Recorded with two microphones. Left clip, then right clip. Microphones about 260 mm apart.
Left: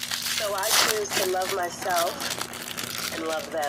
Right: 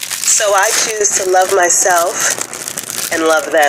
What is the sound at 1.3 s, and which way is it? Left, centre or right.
Speech, right.